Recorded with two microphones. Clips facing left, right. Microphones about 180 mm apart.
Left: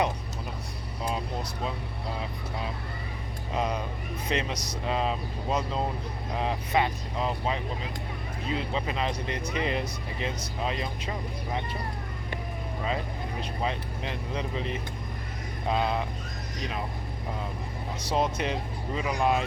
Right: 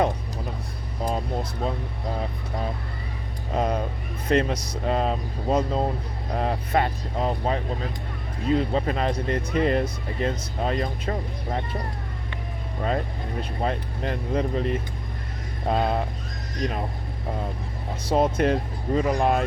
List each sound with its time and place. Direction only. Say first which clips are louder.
1.0 s vehicle: right 5 dB; 40° right (ahead or behind)
3.5 s speech: right 5 dB; 45° right (ahead or behind)
13.6 s speech: right 5 dB; 45° right (ahead or behind)
18.0 s speech: right 7 dB; 50° right (ahead or behind)